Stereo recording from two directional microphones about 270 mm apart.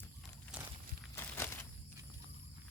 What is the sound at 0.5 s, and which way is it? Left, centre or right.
Walk, centre.